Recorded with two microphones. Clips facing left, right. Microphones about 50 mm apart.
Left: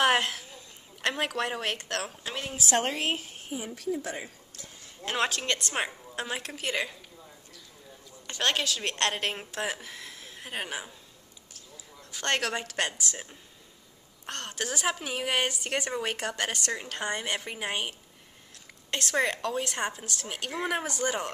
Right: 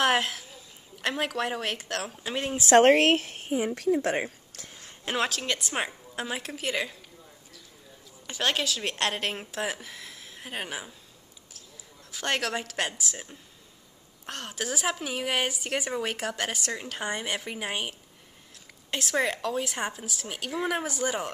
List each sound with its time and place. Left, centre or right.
0.0 s a woman's voice: centre
2.5 s speech: right
2.8 s speech: right
5.1 s speech: centre
8.3 s a woman's voice: centre